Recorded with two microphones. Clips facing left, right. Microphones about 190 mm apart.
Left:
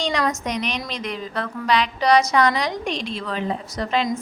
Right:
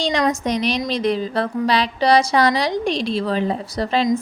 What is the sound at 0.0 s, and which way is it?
A woman's voice, 30° right (ahead or behind).